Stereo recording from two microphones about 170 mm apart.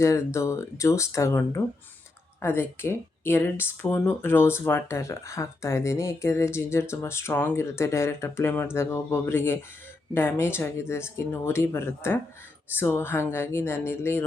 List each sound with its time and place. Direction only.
0.0 s speech: 15° left (ahead or behind)